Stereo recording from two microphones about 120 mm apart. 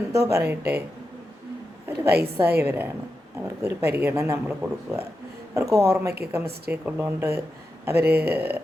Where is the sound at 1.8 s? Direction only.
20° right (ahead or behind).